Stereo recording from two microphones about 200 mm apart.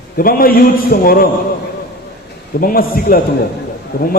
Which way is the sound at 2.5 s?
45° left (ahead or behind).